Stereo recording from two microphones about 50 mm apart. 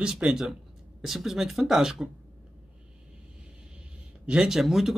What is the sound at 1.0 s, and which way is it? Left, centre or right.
Speech, centre.